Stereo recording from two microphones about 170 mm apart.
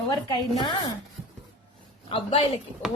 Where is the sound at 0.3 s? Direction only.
25° left (ahead or behind).